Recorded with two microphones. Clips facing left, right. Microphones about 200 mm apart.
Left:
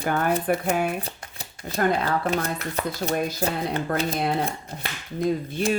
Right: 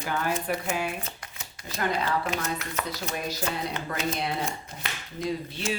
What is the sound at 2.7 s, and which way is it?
Speech, 35° left (ahead or behind).